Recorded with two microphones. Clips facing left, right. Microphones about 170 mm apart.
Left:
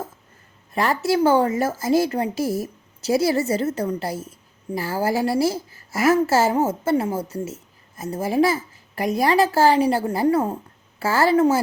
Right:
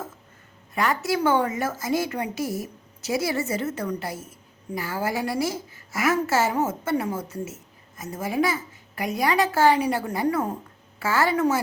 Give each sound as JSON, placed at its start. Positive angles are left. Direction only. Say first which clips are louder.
{"t": 0.7, "sound": "speech", "louder": "left 4 dB", "side_deg": 35}